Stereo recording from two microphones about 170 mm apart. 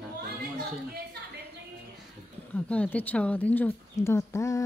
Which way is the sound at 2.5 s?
5° left (ahead or behind).